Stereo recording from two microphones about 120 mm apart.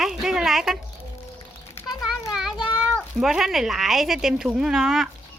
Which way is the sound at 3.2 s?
5° right (ahead or behind).